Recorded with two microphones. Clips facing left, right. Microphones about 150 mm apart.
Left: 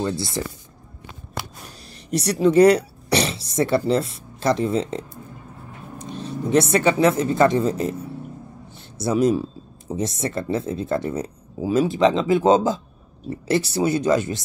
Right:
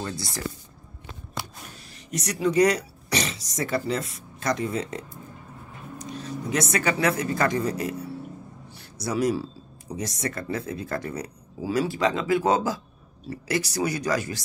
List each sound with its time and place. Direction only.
0.0 s speech: 25° left (ahead or behind)
1.9 s speech: 35° left (ahead or behind)
8.6 s a sound: 25° left (ahead or behind)
9.9 s speech: 25° left (ahead or behind)